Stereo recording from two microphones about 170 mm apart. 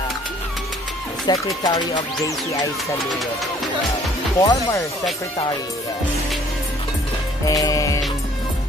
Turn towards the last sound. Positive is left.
turn(degrees=20)  # may be behind; listen again after turning